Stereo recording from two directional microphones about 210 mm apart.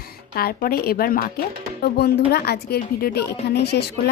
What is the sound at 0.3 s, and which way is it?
Speech, 45° left (ahead or behind).